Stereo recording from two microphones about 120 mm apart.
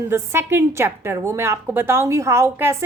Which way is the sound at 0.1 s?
20° right (ahead or behind).